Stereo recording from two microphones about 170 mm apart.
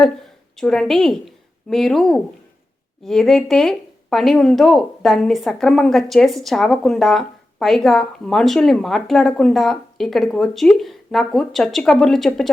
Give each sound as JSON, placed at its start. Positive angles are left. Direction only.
{"t": 0.5, "sound": "a woman's voice", "side_deg": 5}